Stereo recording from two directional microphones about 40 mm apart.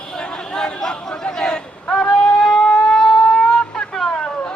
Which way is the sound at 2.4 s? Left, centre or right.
Centre.